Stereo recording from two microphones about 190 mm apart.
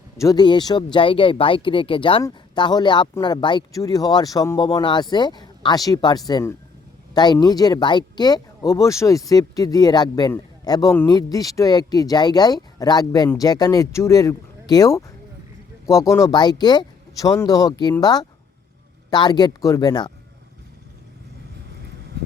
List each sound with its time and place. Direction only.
0.2 s speech: 20° left (ahead or behind)